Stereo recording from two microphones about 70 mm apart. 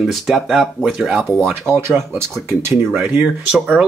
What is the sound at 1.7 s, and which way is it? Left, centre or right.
Speech, right.